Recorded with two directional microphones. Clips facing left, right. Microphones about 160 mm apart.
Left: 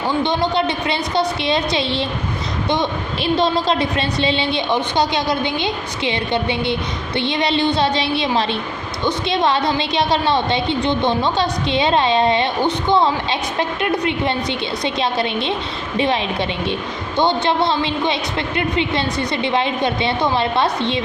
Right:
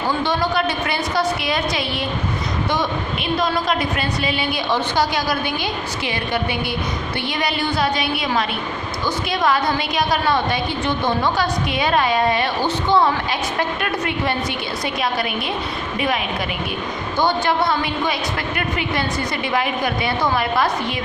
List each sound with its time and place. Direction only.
0.2 s a woman's voice: 20° left (ahead or behind)
3.3 s a woman's voice: 30° left (ahead or behind)
17.2 s a woman's voice: 20° left (ahead or behind)